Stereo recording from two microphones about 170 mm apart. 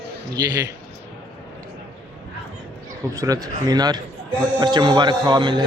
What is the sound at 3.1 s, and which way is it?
A man's voice, 20° right (ahead or behind).